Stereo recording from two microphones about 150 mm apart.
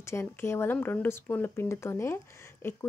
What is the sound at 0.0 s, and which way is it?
A woman's voice, 15° left (ahead or behind).